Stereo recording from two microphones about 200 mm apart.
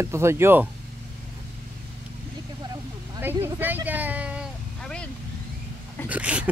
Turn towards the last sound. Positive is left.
turn(degrees=-5)  # may be behind; listen again after turning